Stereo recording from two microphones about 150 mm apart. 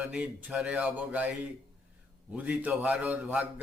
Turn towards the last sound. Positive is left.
turn(degrees=-10)  # may be behind; listen again after turning